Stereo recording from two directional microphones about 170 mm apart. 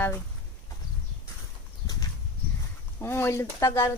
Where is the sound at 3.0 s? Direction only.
15° left (ahead or behind).